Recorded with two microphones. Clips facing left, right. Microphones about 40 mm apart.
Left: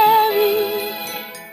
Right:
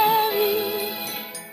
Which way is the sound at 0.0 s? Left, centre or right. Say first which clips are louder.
Left 6 dB; centre.